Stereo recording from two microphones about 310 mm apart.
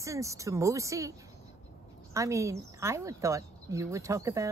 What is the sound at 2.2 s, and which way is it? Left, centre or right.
Speech, centre.